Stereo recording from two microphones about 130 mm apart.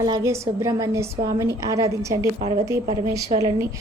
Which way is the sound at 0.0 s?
25° right (ahead or behind).